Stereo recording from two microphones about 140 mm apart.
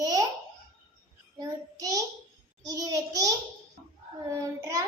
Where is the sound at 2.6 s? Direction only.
25° right (ahead or behind).